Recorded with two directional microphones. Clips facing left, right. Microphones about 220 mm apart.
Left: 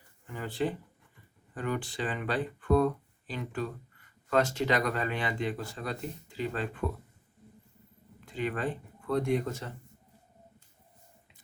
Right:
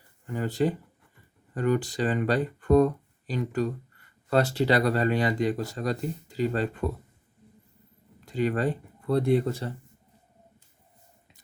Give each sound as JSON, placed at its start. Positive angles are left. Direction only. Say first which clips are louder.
{"t": 0.3, "sound": "speech", "louder": "right 6 dB", "side_deg": -40}
{"t": 8.2, "sound": "speech", "louder": "right 6 dB", "side_deg": -40}